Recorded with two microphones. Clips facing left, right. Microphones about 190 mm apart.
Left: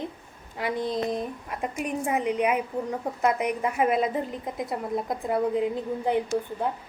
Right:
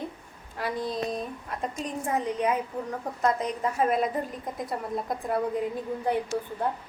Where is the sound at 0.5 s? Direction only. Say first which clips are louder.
Left 3 dB; 20° left (ahead or behind).